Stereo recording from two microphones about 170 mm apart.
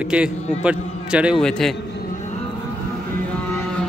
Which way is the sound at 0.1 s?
5° right (ahead or behind).